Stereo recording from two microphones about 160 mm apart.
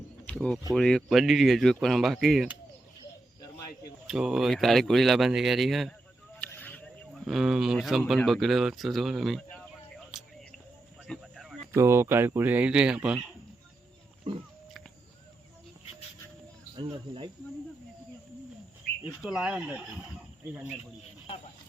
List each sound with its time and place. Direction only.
0.3 s speech: 5° left (ahead or behind)
4.0 s speech: 5° right (ahead or behind)
6.4 s a sound: 10° left (ahead or behind)
7.1 s speech: centre (ahead or behind)
11.0 s a sound: centre (ahead or behind)
11.7 s speech: 15° right (ahead or behind)
14.3 s wild animals: 30° right (ahead or behind)
16.7 s speech: 30° right (ahead or behind)
18.9 s a sound: 75° left (ahead or behind)
19.2 s speech: 5° right (ahead or behind)